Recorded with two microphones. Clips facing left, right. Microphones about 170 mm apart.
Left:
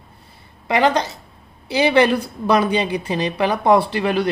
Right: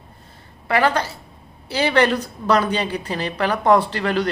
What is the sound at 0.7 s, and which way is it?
A woman's voice, 20° left (ahead or behind).